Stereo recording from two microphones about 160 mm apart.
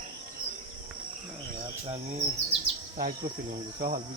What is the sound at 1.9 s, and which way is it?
Bird vocalization, 45° right (ahead or behind).